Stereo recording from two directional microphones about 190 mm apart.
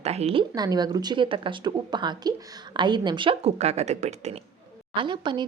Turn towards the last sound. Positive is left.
turn(degrees=-25)  # may be behind; listen again after turning